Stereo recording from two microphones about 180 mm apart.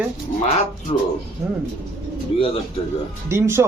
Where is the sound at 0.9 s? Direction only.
30° left (ahead or behind).